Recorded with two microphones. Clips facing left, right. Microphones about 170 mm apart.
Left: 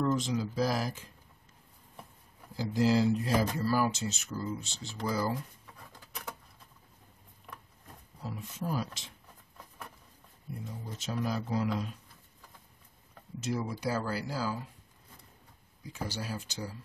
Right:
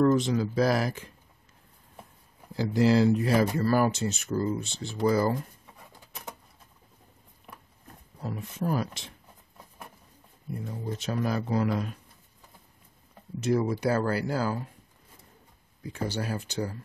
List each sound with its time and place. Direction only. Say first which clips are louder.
0.0 s speech: right 7 dB; 65° right (ahead or behind)
2.5 s speech: right 5 dB; 70° right (ahead or behind)
5.9 s patter: even; 20° right (ahead or behind)
8.2 s speech: right 6 dB; 55° right (ahead or behind)
10.6 s speech: right 8 dB; 60° right (ahead or behind)
13.4 s speech: right 8 dB; 65° right (ahead or behind)
15.8 s speech: right 6 dB; 60° right (ahead or behind)